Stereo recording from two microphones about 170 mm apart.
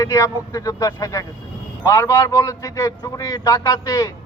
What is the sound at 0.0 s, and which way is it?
A man's voice, 20° left (ahead or behind).